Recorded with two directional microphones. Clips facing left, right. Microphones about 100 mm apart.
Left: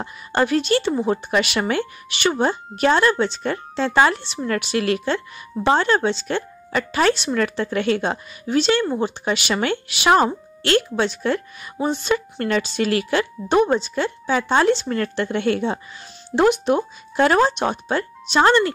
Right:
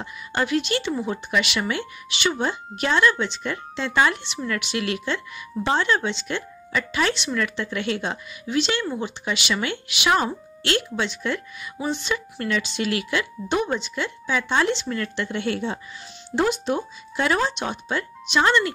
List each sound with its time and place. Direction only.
0.0 s speech: 40° left (ahead or behind); by 16.8 s 60° left (ahead or behind)
17.2 s speech: 45° left (ahead or behind)